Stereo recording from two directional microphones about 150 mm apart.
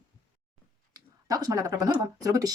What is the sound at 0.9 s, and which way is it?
Speech, 25° right (ahead or behind).